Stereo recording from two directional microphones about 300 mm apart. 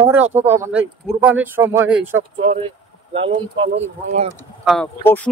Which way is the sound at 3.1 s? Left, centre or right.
Centre.